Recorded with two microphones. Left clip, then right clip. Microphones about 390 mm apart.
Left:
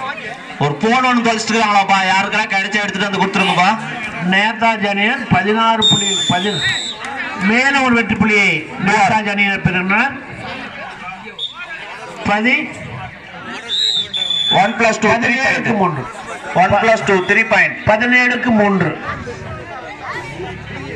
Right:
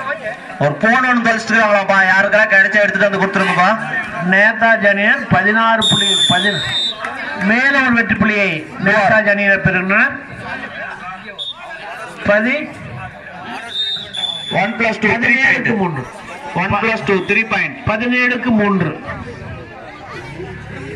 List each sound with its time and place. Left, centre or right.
0.6 s a man's voice: centre
5.9 s speech: right
6.3 s a sound: centre
7.4 s a man's voice: centre
12.3 s a man's voice: centre
14.5 s speech: centre